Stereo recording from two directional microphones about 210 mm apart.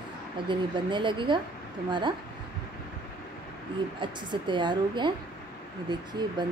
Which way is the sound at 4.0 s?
20° right (ahead or behind).